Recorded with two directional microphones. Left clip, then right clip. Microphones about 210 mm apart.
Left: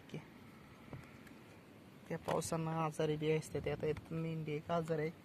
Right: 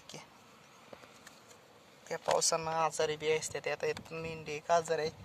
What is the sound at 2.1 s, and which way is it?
Speech, 5° right (ahead or behind).